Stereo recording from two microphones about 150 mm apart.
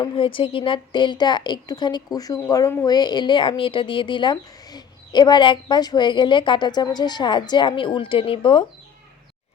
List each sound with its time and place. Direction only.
0.0 s a woman's voice: 35° left (ahead or behind)